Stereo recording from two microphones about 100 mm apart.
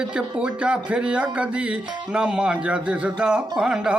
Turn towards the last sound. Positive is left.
turn(degrees=-5)  # may be behind; listen again after turning